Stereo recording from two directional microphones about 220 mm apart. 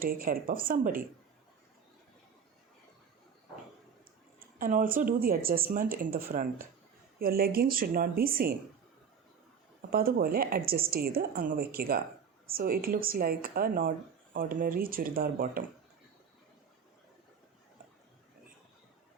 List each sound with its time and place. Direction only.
0.0 s speech: 40° right (ahead or behind)
4.5 s speech: 40° right (ahead or behind)
9.9 s a woman's voice: 40° right (ahead or behind)